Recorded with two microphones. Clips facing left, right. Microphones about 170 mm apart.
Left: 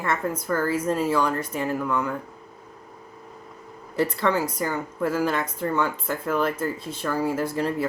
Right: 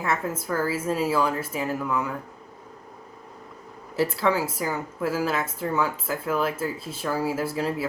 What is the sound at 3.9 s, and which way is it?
A woman's voice, 5° right (ahead or behind).